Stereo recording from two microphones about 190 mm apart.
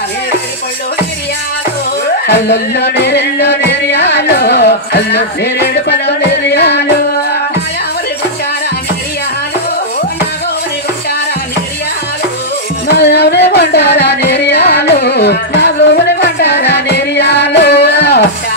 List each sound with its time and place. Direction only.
2.2 s music: 60° left (ahead or behind)
12.8 s music: 60° left (ahead or behind)